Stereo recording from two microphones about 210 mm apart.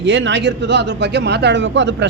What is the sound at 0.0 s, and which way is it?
Speech, 60° right (ahead or behind).